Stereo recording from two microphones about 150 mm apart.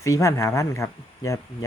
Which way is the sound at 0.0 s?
20° left (ahead or behind).